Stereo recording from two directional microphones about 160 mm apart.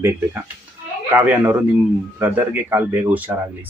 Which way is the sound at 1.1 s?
15° right (ahead or behind).